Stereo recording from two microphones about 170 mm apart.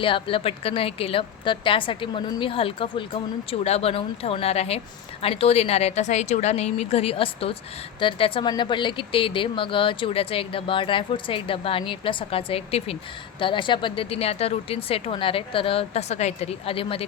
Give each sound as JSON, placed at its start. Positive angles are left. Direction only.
{"t": 0.0, "sound": "speech", "side_deg": 30}